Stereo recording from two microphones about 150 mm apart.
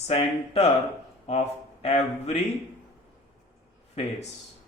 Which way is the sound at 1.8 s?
45° left (ahead or behind).